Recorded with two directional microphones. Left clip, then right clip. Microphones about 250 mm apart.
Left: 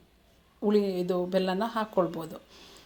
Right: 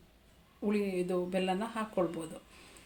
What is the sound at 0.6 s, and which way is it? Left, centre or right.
Speech, left.